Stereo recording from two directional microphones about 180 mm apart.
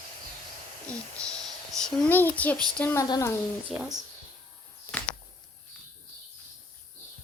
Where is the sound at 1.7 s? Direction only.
5° left (ahead or behind).